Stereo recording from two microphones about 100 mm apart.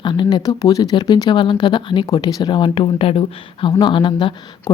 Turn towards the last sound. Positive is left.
turn(degrees=55)  # may be behind; listen again after turning